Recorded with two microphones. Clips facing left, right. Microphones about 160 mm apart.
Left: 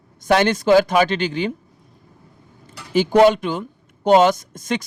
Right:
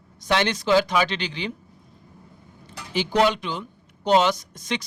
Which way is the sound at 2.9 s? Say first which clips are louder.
Left 8 dB; 45° left (ahead or behind).